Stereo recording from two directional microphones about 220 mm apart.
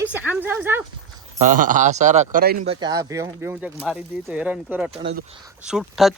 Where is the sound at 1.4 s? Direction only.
35° right (ahead or behind).